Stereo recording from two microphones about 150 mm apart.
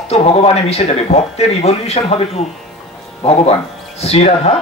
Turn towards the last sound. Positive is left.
turn(degrees=45)  # may be behind; listen again after turning